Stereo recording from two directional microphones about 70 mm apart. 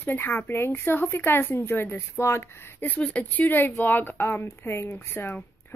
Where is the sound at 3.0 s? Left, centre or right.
Centre.